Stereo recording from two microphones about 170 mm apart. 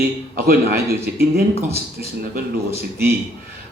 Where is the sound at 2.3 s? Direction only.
65° right (ahead or behind).